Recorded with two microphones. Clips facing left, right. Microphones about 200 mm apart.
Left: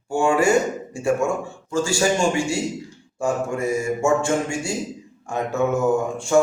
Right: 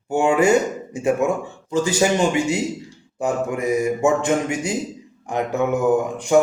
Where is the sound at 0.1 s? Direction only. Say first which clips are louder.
Right 2 dB; 20° right (ahead or behind).